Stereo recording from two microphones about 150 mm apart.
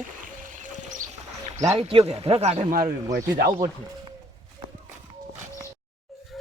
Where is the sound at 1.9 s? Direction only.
40° right (ahead or behind).